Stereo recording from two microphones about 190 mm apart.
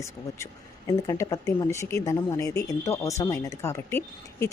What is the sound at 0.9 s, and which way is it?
Speech, 20° left (ahead or behind).